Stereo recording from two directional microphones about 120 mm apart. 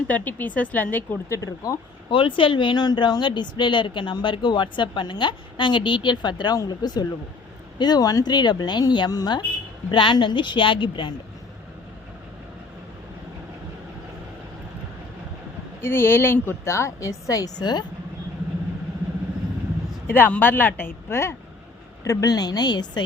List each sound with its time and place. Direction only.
0.1 s speech: 15° left (ahead or behind)
1.4 s a woman's voice: 30° left (ahead or behind)
2.0 s speech: 45° left (ahead or behind)
15.8 s a woman's voice: 20° left (ahead or behind); by 17.8 s 35° left (ahead or behind)
20.1 s speech: 15° left (ahead or behind); by 23.0 s 35° left (ahead or behind)